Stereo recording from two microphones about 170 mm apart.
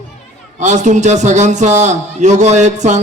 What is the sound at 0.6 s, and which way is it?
A man's voice, 45° right (ahead or behind).